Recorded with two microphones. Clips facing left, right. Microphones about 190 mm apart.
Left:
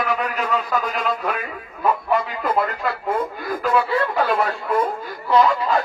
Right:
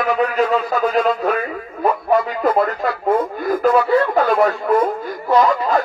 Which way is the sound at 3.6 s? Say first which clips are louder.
Right 5 dB; 50° right (ahead or behind).